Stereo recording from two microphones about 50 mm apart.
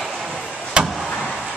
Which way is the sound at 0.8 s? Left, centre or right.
Centre.